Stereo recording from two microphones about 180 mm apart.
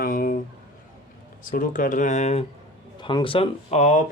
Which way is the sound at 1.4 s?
50° left (ahead or behind).